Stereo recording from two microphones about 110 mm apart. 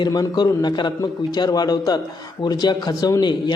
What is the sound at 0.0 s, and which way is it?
A man's voice, 40° left (ahead or behind).